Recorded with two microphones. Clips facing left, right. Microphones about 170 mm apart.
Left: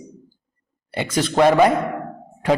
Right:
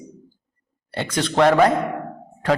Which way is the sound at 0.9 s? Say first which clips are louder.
Left 1 dB; 10° left (ahead or behind).